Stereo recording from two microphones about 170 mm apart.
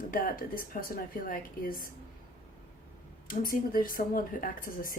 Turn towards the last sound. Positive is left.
turn(degrees=55)  # may be behind; listen again after turning